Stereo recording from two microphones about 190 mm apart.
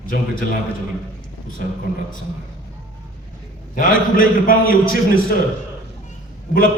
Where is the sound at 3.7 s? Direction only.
45° left (ahead or behind).